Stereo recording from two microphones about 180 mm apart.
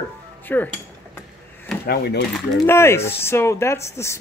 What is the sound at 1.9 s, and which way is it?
Speech, 65° left (ahead or behind).